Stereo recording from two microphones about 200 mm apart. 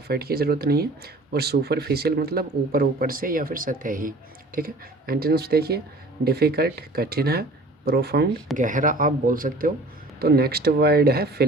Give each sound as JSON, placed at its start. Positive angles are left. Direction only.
{"t": 0.1, "sound": "speech", "side_deg": -50}
{"t": 8.5, "sound": "speech", "side_deg": -40}